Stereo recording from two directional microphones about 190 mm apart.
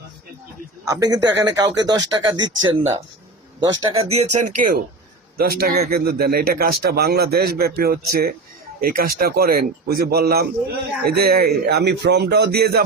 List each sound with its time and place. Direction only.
0.9 s speech: 20° right (ahead or behind); by 4.5 s 35° right (ahead or behind)
5.4 s a man's voice: 55° right (ahead or behind)